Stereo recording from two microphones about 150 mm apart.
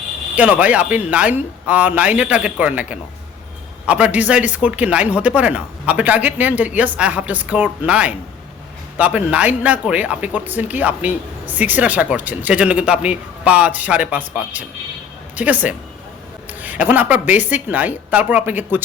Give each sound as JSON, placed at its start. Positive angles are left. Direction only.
{"t": 0.3, "sound": "speech", "side_deg": -10}